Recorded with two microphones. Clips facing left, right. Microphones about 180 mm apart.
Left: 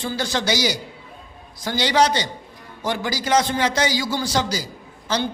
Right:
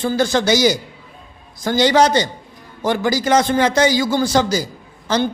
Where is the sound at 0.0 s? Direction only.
50° right (ahead or behind).